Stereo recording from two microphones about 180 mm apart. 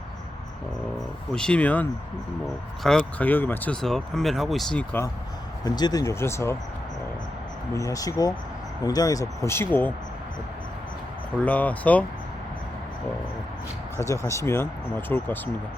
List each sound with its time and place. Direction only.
0.9 s speech: 5° left (ahead or behind)
5.6 s speech: 20° left (ahead or behind)
7.7 s speech: 20° left (ahead or behind)
11.4 s speech: 10° left (ahead or behind)
13.9 s speech: 15° left (ahead or behind)